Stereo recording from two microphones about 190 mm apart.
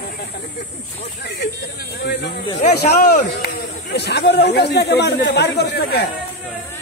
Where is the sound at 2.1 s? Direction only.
60° left (ahead or behind).